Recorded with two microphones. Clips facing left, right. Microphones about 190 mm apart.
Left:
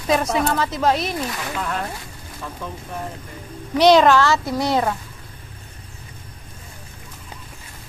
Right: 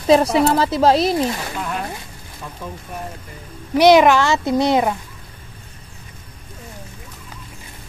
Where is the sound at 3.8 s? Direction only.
10° right (ahead or behind).